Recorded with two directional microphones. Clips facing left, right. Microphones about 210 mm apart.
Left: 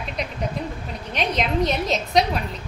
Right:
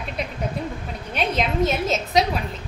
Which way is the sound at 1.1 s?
5° right (ahead or behind).